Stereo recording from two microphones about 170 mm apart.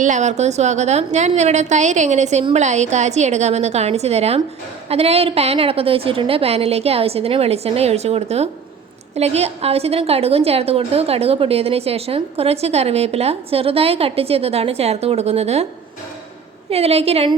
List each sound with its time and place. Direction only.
0.0 s a woman's voice: 45° right (ahead or behind)
16.6 s a woman's voice: 35° right (ahead or behind)